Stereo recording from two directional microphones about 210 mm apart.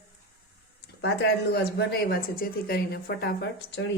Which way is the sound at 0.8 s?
55° left (ahead or behind).